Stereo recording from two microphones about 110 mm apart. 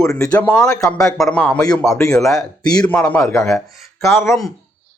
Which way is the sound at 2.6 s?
35° left (ahead or behind).